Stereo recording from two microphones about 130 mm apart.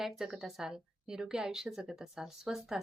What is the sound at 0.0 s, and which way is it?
Speech, centre (ahead or behind).